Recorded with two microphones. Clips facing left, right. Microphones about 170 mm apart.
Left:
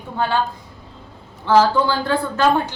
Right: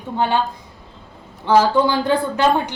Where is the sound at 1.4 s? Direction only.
15° right (ahead or behind).